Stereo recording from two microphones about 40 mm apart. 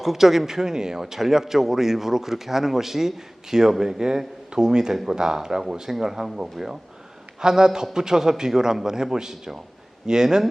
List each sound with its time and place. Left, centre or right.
0.0 s speech: centre